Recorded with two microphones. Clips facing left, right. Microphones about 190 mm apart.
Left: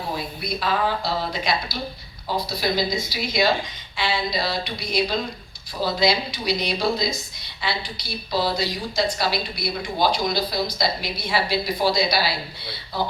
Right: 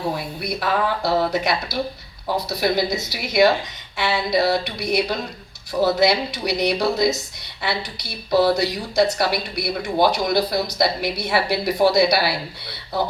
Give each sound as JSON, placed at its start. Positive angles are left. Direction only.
{"t": 0.4, "sound": "speech", "side_deg": -65}